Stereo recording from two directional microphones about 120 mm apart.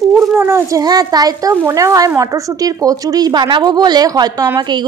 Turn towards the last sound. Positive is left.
turn(degrees=-40)  # may be behind; listen again after turning